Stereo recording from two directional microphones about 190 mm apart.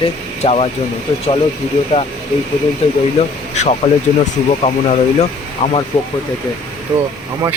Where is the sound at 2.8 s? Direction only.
30° left (ahead or behind).